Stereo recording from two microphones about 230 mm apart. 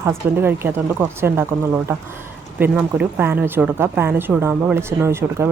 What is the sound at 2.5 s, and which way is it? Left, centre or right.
Speech, centre.